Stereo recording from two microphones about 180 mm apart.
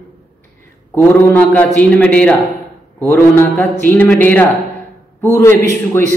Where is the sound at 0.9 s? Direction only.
10° left (ahead or behind).